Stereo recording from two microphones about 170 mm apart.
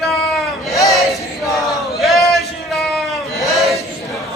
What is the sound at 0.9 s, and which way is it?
Chant, centre (ahead or behind).